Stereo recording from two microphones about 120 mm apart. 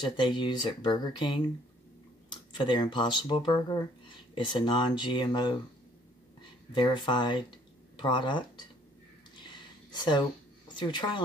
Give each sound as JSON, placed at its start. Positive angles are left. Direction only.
{"t": 0.2, "sound": "speech", "side_deg": 40}
{"t": 6.7, "sound": "speech", "side_deg": 40}
{"t": 9.3, "sound": "a sound", "side_deg": 40}
{"t": 10.7, "sound": "speech", "side_deg": 40}